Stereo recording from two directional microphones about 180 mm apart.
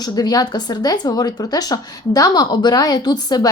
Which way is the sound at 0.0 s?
20° left (ahead or behind).